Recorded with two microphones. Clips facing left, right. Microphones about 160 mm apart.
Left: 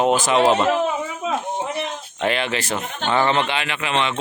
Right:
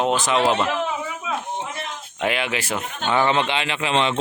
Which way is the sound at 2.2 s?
5° right (ahead or behind).